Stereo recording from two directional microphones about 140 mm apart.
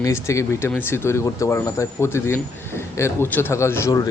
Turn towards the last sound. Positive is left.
turn(degrees=20)  # may be behind; listen again after turning